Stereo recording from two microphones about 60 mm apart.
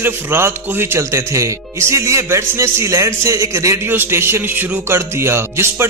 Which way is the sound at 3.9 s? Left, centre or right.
Right.